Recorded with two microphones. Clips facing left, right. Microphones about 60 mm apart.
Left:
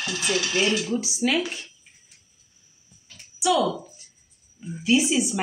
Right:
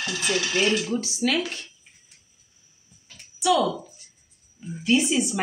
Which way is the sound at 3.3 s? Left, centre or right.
Centre.